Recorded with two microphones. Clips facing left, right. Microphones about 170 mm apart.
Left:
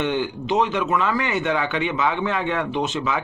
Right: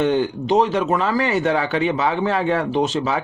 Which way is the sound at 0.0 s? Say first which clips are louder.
Right 5 dB; 40° right (ahead or behind).